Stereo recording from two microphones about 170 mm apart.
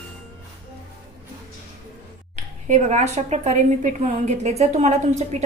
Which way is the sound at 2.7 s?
40° right (ahead or behind).